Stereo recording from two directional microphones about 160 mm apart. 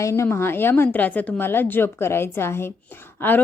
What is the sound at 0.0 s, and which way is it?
Speech, 15° left (ahead or behind).